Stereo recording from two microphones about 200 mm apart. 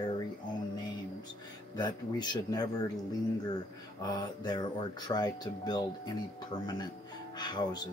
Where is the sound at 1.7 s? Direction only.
20° left (ahead or behind).